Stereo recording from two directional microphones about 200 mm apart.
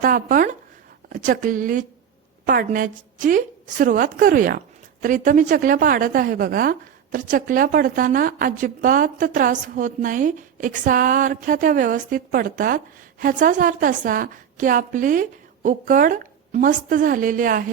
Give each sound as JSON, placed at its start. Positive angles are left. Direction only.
{"t": 0.0, "sound": "speech", "side_deg": -45}